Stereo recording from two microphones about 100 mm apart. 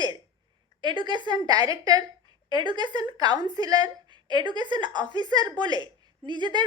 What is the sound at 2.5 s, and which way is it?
A woman's voice, 50° right (ahead or behind).